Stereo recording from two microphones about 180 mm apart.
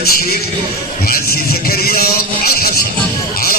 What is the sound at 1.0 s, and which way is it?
Music, 55° left (ahead or behind).